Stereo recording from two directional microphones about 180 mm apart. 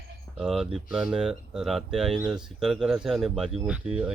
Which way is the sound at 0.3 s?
Centre (ahead or behind).